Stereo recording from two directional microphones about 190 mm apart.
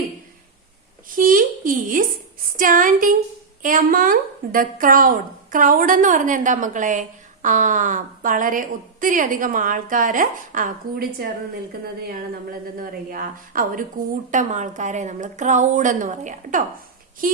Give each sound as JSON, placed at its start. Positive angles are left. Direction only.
{"t": 1.1, "sound": "a woman's voice", "side_deg": -45}
{"t": 12.5, "sound": "a woman's voice", "side_deg": -50}